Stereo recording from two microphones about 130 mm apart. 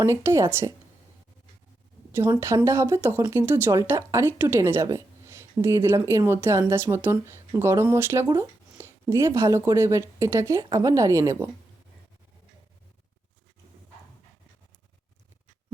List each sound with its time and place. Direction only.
0.0 s speech: 20° right (ahead or behind)
2.6 s speech: 20° right (ahead or behind)